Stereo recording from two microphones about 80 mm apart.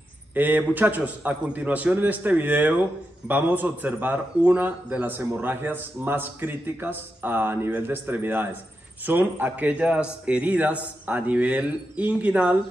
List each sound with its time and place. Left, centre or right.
0.3 s a man's voice: right